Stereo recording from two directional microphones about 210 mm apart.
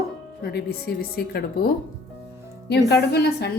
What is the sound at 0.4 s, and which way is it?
A woman's voice, 50° left (ahead or behind).